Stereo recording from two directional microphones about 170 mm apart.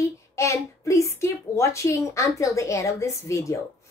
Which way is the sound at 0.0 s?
15° left (ahead or behind).